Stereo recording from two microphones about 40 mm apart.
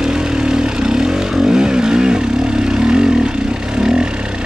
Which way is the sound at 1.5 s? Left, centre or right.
Centre.